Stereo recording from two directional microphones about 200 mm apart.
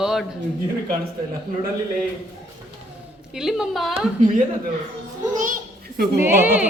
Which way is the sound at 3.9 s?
40° right (ahead or behind).